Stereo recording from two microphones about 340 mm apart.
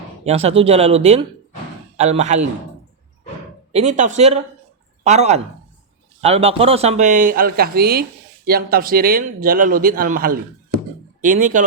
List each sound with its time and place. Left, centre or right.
0.3 s a man's voice: centre
3.7 s a man's voice: centre